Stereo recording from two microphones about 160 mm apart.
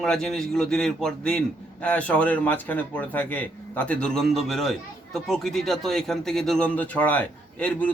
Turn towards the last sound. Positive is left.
turn(degrees=10)  # may be behind; listen again after turning